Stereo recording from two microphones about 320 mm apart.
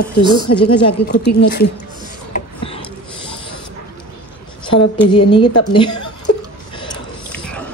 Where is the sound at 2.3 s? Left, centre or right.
Centre.